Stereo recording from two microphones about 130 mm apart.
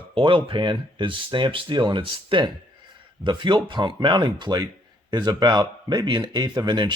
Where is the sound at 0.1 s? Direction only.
40° right (ahead or behind).